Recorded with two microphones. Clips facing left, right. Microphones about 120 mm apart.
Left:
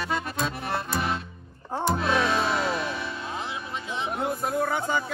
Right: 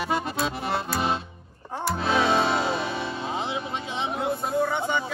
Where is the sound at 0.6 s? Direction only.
25° right (ahead or behind).